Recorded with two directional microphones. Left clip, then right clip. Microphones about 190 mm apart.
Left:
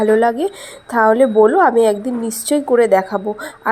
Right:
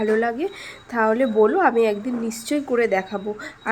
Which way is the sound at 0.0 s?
20° left (ahead or behind).